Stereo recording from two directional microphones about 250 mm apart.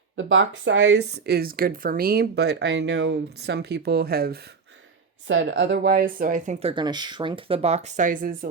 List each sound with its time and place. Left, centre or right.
0.2 s speech: right
5.3 s speech: right